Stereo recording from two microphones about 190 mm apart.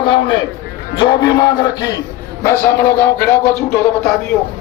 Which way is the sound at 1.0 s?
20° left (ahead or behind).